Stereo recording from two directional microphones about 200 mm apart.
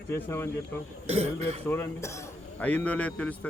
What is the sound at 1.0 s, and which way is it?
Speech, 30° right (ahead or behind).